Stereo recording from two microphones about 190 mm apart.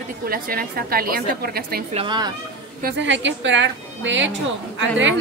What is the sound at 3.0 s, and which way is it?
A woman's voice, 75° right (ahead or behind).